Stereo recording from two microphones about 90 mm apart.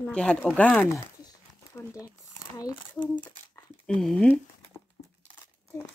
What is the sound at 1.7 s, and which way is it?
Speech, 35° left (ahead or behind).